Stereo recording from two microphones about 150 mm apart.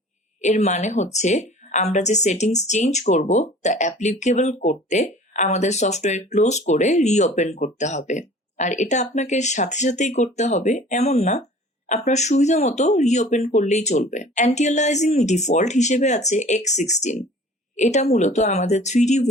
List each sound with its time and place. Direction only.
0.4 s speech: 50° left (ahead or behind)